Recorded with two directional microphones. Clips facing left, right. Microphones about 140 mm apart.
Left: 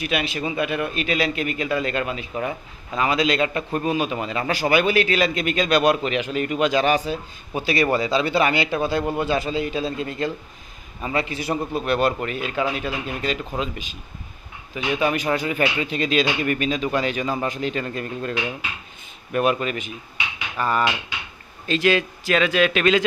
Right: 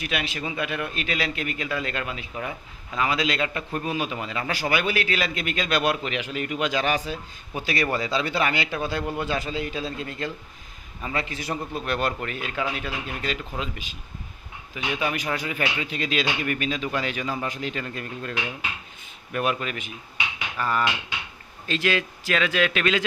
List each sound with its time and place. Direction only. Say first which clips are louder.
0.0 s a man's voice: left 5 dB; 20° left (ahead or behind)
15.0 s a man's voice: left 6 dB; 35° left (ahead or behind)